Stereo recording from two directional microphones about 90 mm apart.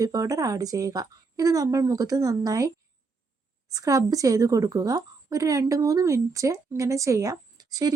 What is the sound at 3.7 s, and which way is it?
Speech, 40° right (ahead or behind).